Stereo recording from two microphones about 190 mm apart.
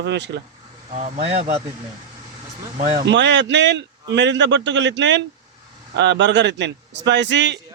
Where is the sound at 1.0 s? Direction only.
35° right (ahead or behind).